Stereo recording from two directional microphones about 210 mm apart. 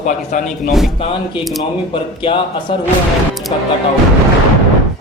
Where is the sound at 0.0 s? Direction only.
35° left (ahead or behind).